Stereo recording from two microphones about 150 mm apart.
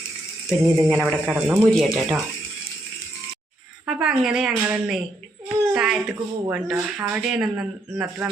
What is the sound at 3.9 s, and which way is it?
Speech, 5° right (ahead or behind).